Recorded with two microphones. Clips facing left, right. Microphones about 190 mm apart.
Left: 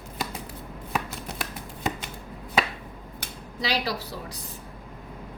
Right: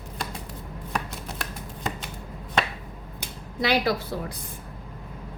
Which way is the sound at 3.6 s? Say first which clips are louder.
Right 5 dB; 55° right (ahead or behind).